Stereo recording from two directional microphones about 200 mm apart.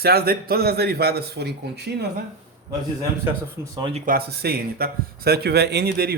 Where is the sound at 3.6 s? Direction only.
25° right (ahead or behind).